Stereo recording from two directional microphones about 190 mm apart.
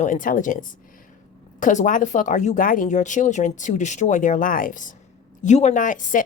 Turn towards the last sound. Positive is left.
turn(degrees=45)  # may be behind; listen again after turning